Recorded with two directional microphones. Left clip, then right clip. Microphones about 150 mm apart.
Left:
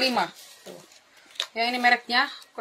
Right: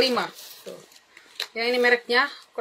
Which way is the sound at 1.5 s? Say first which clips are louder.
Right 1 dB; 10° left (ahead or behind).